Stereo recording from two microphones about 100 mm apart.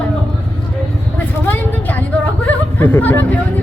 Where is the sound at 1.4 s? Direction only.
20° left (ahead or behind).